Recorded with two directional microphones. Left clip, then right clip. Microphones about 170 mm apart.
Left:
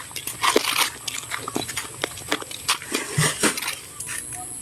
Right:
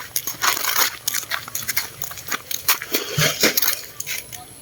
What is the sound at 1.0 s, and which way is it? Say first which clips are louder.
Biting: right 4 dB; 70° right (ahead or behind).